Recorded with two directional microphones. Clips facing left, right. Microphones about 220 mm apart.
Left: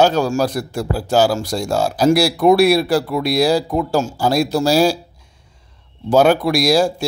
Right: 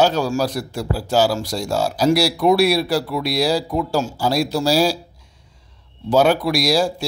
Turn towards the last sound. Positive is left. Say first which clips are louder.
# left 3 dB
turn(degrees=50)  # may be behind; listen again after turning